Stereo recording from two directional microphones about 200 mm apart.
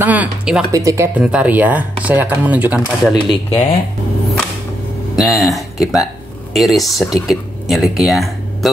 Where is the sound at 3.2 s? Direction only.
25° left (ahead or behind).